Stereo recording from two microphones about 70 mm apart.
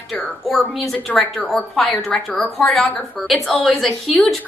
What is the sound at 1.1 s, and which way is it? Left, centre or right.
A woman's voice, left.